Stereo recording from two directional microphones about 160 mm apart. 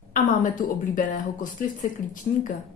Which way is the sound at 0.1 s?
55° left (ahead or behind).